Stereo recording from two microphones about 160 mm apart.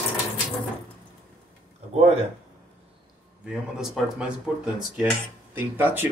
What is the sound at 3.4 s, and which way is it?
Speech, 5° right (ahead or behind).